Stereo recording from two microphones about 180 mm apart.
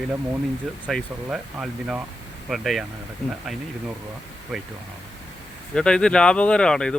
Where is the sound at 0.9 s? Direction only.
Centre (ahead or behind).